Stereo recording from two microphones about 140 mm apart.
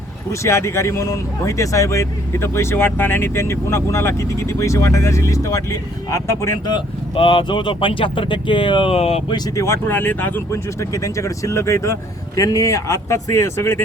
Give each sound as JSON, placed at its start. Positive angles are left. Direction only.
{"t": 0.3, "sound": "speech", "side_deg": 20}
{"t": 6.7, "sound": "speech", "side_deg": 35}
{"t": 9.3, "sound": "speech", "side_deg": 20}